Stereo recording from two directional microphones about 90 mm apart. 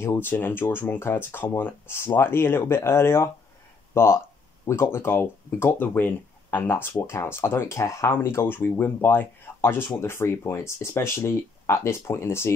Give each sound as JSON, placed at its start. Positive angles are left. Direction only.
{"t": 0.0, "sound": "speech", "side_deg": 25}